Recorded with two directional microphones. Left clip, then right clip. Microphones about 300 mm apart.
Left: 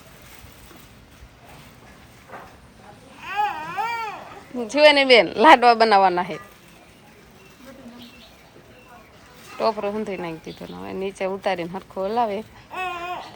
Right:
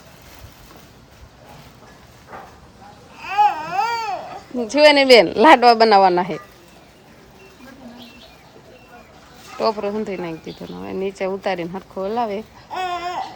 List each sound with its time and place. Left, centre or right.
3.2 s a sound: right
4.5 s speech: centre
9.6 s speech: centre
12.7 s babbling: right